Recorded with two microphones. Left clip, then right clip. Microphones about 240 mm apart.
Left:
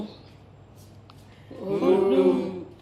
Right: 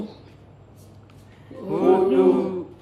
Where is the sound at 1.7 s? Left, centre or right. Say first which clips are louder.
Right 3 dB; centre.